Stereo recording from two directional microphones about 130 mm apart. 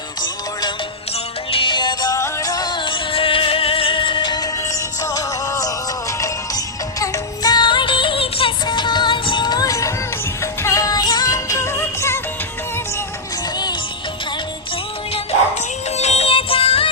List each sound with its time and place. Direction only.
1.5 s music: 45° left (ahead or behind); by 12.2 s 20° left (ahead or behind)
16.0 s music: 55° left (ahead or behind)